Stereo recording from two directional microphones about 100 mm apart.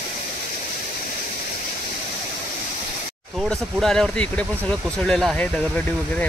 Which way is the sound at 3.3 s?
5° left (ahead or behind).